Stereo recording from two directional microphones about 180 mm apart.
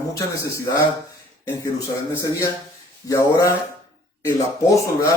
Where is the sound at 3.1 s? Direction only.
15° left (ahead or behind).